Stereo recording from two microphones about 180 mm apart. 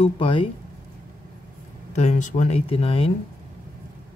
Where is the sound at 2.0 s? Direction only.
40° left (ahead or behind).